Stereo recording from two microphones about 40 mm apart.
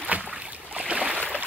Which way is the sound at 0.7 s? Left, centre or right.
Right.